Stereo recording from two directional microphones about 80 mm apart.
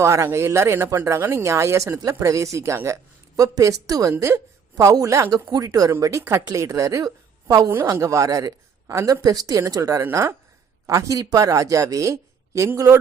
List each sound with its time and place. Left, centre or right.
0.0 s speech: right
5.3 s speech: right
6.0 s speech: right
7.7 s speech: right